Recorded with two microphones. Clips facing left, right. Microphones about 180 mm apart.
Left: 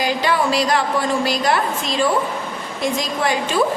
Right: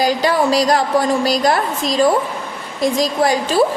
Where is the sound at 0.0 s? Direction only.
40° right (ahead or behind).